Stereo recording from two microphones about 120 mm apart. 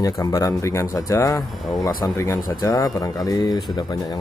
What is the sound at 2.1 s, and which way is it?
Speech, 25° left (ahead or behind).